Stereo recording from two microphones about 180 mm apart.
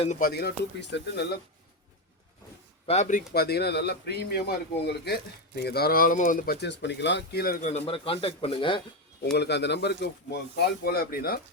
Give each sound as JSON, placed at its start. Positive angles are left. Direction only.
{"t": 0.2, "sound": "speech", "side_deg": 60}
{"t": 2.8, "sound": "speech", "side_deg": 40}
{"t": 9.2, "sound": "speech", "side_deg": 65}